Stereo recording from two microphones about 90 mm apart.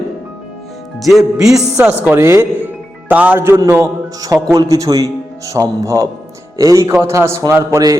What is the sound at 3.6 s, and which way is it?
A man's voice, 30° right (ahead or behind).